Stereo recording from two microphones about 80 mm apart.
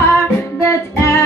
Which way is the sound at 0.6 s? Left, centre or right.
Left.